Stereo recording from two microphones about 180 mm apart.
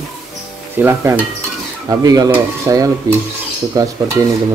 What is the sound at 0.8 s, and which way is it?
Stir, 15° right (ahead or behind).